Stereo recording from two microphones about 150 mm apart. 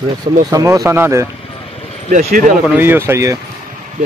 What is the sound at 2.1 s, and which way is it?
Speech, 60° right (ahead or behind).